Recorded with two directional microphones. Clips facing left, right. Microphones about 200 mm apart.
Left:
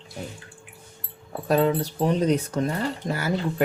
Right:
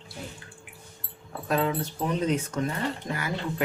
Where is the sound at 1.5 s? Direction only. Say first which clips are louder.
Left 5 dB; 35° left (ahead or behind).